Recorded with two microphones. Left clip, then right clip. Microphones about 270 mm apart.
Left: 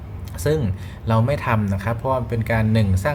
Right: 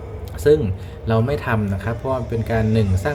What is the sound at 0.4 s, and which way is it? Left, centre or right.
Speech, centre.